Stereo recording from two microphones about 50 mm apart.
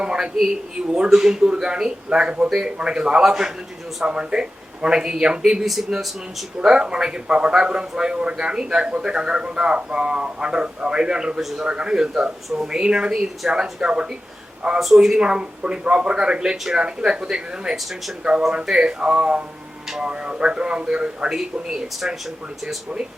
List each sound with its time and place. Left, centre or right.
0.0 s a man's voice: centre
5.6 s speech: centre
6.6 s a man's voice: centre
11.3 s speech: centre
11.7 s a man's voice: centre
14.8 s a man's voice: centre